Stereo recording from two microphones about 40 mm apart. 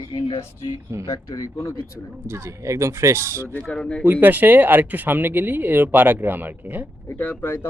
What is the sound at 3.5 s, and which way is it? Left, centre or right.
Speech, left.